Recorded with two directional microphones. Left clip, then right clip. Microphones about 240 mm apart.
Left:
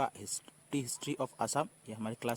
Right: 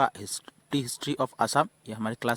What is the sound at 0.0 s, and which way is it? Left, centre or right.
Speech, right.